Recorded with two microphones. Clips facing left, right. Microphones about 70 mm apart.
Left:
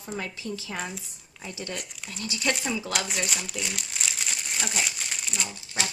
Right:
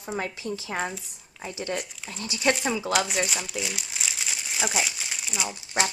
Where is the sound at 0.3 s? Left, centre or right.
Right.